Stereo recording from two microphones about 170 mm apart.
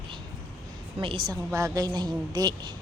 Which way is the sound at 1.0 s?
30° right (ahead or behind).